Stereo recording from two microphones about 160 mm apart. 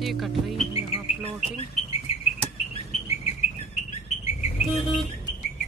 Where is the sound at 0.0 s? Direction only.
Centre (ahead or behind).